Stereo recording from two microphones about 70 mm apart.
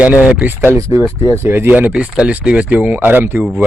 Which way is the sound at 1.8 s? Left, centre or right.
Centre.